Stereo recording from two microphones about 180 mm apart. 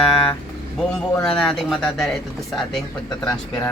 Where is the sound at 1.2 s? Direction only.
Centre (ahead or behind).